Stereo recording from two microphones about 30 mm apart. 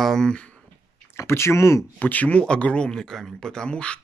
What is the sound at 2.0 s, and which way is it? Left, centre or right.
Speech, left.